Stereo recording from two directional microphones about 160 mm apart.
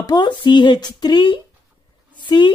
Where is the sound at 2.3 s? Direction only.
30° left (ahead or behind).